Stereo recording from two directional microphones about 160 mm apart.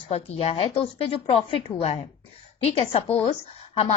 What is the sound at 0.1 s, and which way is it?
A woman's voice, 40° left (ahead or behind).